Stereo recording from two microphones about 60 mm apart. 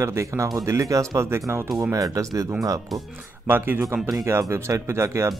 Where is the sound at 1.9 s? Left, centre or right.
Right.